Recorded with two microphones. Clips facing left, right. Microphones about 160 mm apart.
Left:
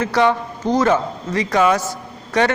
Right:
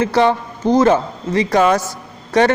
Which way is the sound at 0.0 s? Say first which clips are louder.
Right 2 dB; 30° right (ahead or behind).